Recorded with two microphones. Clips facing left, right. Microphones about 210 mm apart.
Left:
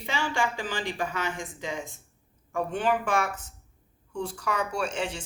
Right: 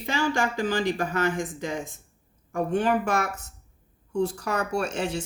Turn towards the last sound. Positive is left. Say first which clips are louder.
# right 3 dB
turn(degrees=-40)  # may be behind; listen again after turning